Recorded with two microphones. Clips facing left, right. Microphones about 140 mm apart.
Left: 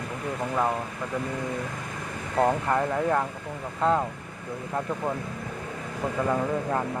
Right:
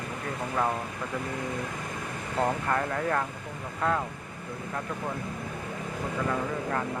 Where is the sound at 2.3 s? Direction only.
15° left (ahead or behind).